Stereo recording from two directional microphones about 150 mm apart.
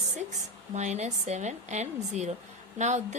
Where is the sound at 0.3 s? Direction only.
50° right (ahead or behind).